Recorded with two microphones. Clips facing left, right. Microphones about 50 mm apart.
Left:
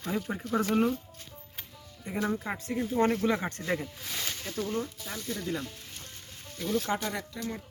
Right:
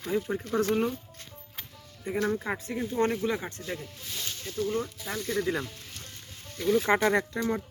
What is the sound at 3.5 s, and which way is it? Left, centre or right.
Speech, left.